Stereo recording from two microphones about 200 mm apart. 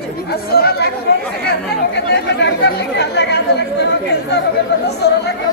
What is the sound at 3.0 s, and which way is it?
Chatter, 55° left (ahead or behind).